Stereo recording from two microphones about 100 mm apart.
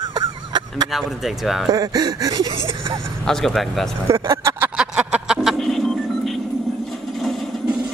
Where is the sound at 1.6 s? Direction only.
40° right (ahead or behind).